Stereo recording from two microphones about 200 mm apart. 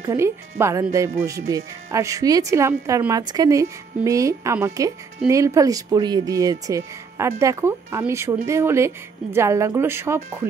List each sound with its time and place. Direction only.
0.0 s speech: 15° right (ahead or behind)